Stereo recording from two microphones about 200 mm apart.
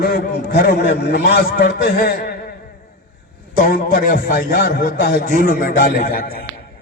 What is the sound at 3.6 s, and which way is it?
A man's voice, 45° left (ahead or behind).